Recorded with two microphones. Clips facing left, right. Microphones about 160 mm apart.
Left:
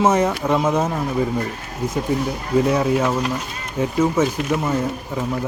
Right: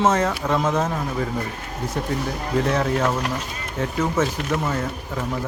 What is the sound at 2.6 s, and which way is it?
Speech, 10° left (ahead or behind).